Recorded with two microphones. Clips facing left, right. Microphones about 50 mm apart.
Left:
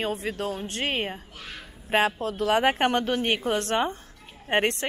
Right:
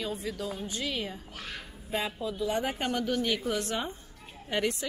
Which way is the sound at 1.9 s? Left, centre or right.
Left.